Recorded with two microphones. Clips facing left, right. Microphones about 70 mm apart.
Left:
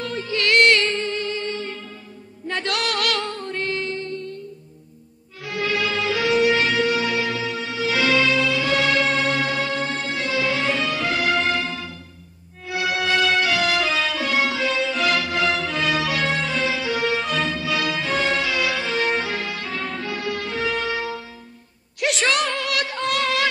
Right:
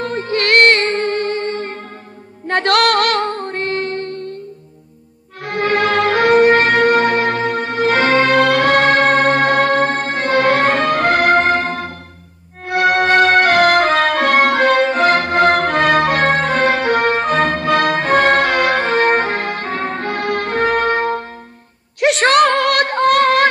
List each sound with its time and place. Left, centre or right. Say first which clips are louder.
0.0 s music: right 6 dB; right
2.4 s music: right 11 dB; right
5.4 s music: right 8 dB; right
22.0 s a sound: right 10 dB; right